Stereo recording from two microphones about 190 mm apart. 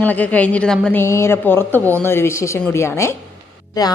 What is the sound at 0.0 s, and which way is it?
A woman's voice, 10° left (ahead or behind).